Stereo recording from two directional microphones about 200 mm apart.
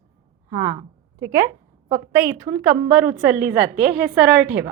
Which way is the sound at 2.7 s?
5° right (ahead or behind).